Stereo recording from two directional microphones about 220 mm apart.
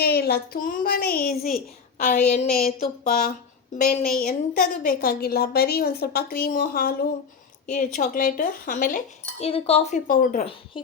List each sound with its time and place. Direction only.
0.0 s speech: 45° left (ahead or behind)
2.0 s a woman's voice: 35° left (ahead or behind)
9.4 s speech: 25° left (ahead or behind)